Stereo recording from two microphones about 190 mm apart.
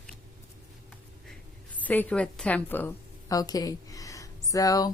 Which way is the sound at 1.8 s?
10° left (ahead or behind).